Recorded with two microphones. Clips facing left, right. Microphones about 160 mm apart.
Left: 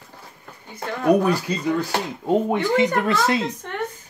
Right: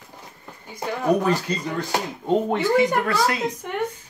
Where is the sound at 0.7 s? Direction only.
15° right (ahead or behind).